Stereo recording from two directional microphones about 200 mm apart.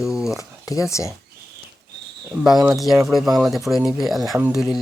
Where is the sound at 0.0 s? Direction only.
5° right (ahead or behind).